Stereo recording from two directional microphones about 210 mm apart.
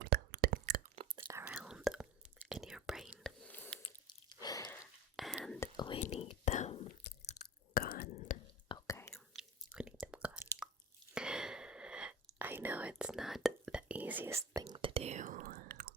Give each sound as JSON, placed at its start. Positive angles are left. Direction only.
{"t": 0.0, "sound": "whispering", "side_deg": -50}
{"t": 1.4, "sound": "whispering", "side_deg": -10}
{"t": 3.8, "sound": "chewing", "side_deg": 20}
{"t": 5.1, "sound": "whispering", "side_deg": 0}
{"t": 5.5, "sound": "whispering", "side_deg": 20}
{"t": 7.3, "sound": "chewing", "side_deg": 45}
{"t": 8.7, "sound": "whispering", "side_deg": 15}
{"t": 9.1, "sound": "chewing", "side_deg": 0}
{"t": 9.7, "sound": "whispering", "side_deg": -5}
{"t": 14.6, "sound": "whispering", "side_deg": -25}